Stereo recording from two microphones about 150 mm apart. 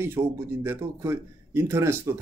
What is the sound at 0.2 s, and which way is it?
Speech, 25° right (ahead or behind).